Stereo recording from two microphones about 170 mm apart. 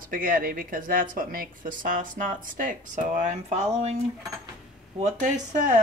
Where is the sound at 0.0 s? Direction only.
55° right (ahead or behind).